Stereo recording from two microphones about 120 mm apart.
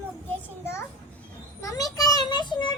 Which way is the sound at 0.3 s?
20° left (ahead or behind).